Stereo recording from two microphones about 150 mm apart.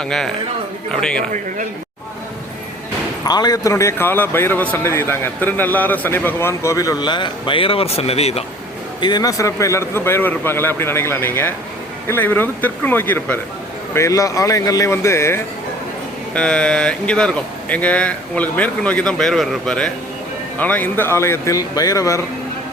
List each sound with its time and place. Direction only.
0.0 s speech: 5° left (ahead or behind)
3.2 s a man's voice: 25° left (ahead or behind); by 8.4 s 45° left (ahead or behind)
9.0 s a man's voice: 30° left (ahead or behind)
16.3 s speech: 5° left (ahead or behind); by 22.2 s 20° left (ahead or behind)